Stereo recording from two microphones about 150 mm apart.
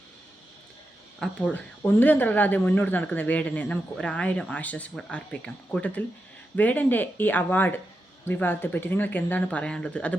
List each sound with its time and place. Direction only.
1.2 s speech: 5° left (ahead or behind)